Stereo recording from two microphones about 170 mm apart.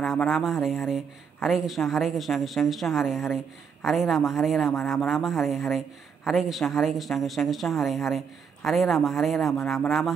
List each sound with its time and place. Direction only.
0.0 s speech: centre (ahead or behind)